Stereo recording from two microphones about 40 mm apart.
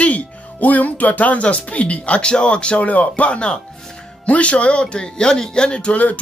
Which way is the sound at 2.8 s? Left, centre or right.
Left.